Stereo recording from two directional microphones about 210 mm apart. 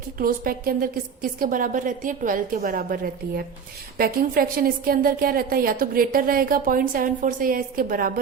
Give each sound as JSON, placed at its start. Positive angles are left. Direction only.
{"t": 0.2, "sound": "a woman's voice", "side_deg": -45}